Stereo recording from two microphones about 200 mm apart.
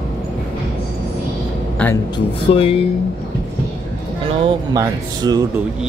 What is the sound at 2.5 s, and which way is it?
Speech, 30° left (ahead or behind).